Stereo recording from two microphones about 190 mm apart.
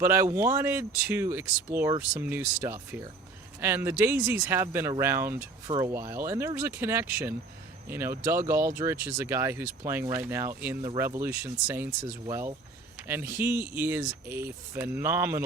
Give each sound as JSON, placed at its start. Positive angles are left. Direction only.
{"t": 0.0, "sound": "speech", "side_deg": -15}